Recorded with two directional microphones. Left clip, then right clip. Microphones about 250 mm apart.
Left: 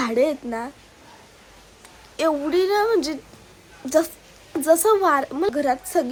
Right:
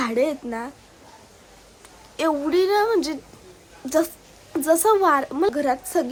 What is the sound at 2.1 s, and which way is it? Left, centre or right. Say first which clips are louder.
A woman's voice: even; centre.